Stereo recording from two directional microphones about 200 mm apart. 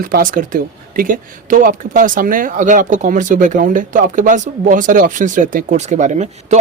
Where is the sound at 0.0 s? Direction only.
45° right (ahead or behind).